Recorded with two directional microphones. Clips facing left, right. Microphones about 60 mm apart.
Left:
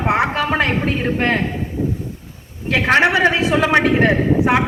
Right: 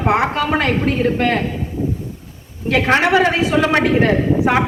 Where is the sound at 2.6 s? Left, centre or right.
Centre.